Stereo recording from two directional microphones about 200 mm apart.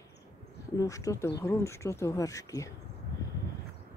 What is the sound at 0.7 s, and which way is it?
Speech, 15° left (ahead or behind).